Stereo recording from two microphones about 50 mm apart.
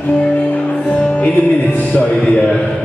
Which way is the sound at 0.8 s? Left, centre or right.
Left.